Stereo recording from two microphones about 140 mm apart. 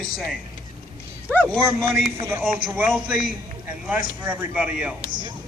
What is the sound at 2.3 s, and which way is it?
Speech, 15° right (ahead or behind).